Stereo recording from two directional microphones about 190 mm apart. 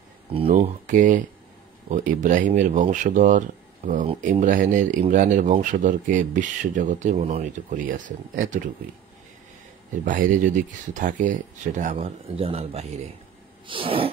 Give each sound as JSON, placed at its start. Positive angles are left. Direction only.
{"t": 0.3, "sound": "speech", "side_deg": -30}
{"t": 0.6, "sound": "speech", "side_deg": -45}
{"t": 7.7, "sound": "speech", "side_deg": -45}
{"t": 10.0, "sound": "speech", "side_deg": -45}
{"t": 13.7, "sound": "sneeze", "side_deg": -30}